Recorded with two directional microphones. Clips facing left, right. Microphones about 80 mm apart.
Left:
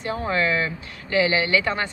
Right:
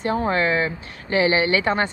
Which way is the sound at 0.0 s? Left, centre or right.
Right.